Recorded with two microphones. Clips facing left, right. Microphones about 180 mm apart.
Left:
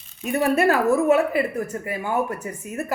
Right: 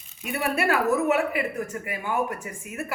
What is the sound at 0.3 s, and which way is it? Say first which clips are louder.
Speech: left 6 dB; 40° left (ahead or behind).